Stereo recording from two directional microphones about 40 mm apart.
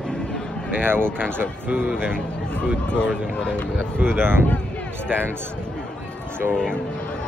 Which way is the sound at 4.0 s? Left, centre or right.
Right.